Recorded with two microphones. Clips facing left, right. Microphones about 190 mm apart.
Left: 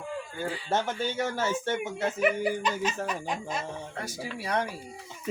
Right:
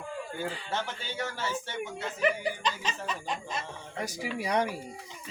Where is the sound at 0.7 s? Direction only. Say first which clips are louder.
Left 6 dB; 45° left (ahead or behind).